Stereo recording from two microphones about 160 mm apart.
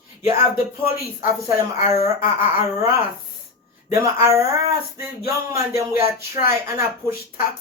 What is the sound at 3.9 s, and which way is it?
A man's voice, 20° right (ahead or behind).